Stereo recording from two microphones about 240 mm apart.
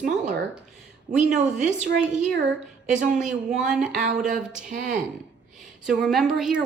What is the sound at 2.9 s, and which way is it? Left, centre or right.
Speech, right.